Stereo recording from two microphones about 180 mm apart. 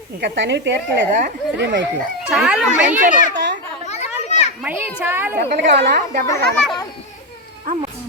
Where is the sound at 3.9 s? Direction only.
35° left (ahead or behind).